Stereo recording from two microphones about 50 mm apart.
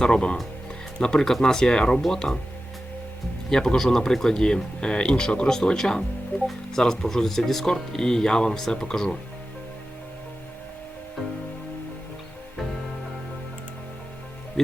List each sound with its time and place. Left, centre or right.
0.0 s speech: centre
3.5 s speech: centre